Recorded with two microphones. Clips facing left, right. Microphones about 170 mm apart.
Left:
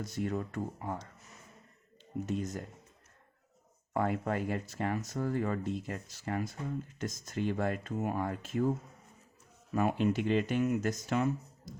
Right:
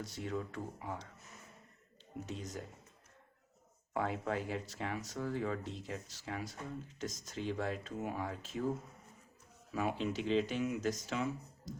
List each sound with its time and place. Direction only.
0.0 s speech: 50° left (ahead or behind)
2.2 s speech: 50° left (ahead or behind)
3.9 s speech: 50° left (ahead or behind)
9.7 s speech: 55° left (ahead or behind)